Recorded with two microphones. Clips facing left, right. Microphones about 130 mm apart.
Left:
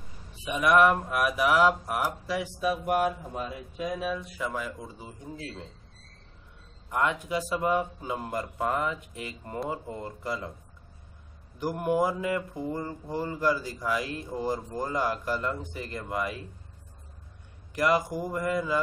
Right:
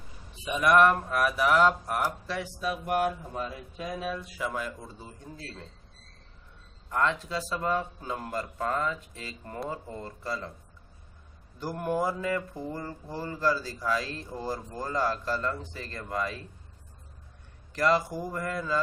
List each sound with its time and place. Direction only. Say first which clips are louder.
0.5 s speech: even; 5° left (ahead or behind)
6.9 s speech: left 1 dB; 15° left (ahead or behind)
11.6 s speech: left 3 dB; 15° left (ahead or behind)
17.7 s speech: even; 15° left (ahead or behind)